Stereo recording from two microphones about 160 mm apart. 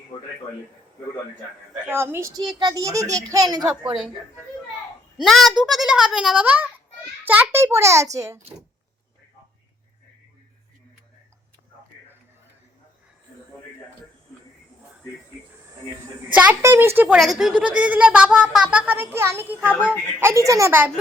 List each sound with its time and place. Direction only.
1.7 s a child's voice: 15° right (ahead or behind)
5.1 s a child's voice: centre (ahead or behind); by 8.4 s 20° right (ahead or behind)
16.3 s speech: 10° right (ahead or behind)
17.2 s a child's voice: centre (ahead or behind)